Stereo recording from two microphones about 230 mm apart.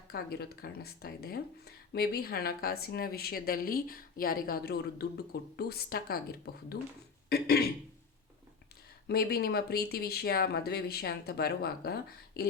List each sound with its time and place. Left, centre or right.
0.1 s speech: left
7.3 s a sound: left
9.0 s speech: left